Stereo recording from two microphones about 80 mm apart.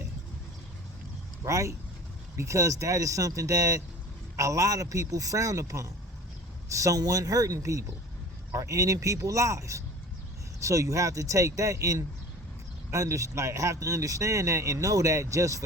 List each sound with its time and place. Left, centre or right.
1.5 s speech: right